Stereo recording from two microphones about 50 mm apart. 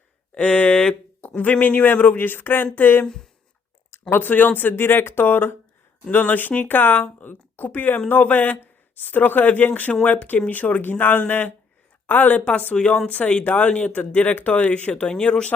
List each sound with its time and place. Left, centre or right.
0.3 s speech: left
1.4 s speech: left
4.1 s speech: left
12.7 s speech: centre